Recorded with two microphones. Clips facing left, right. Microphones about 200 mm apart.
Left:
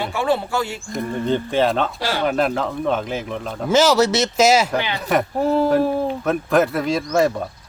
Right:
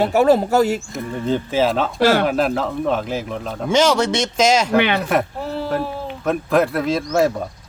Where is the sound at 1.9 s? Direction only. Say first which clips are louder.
Right 9 dB; 40° right (ahead or behind).